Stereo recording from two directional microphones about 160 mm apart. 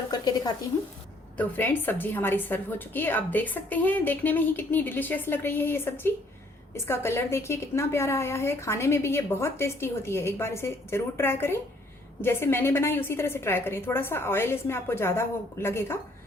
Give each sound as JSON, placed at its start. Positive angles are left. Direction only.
{"t": 0.1, "sound": "a woman's voice", "side_deg": 25}
{"t": 1.4, "sound": "a woman's voice", "side_deg": 10}